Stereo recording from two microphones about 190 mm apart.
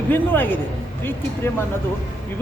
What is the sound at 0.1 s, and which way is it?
Speech, 10° left (ahead or behind).